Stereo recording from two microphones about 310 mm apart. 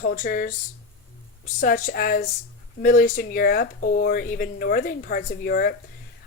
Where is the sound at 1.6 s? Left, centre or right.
Left.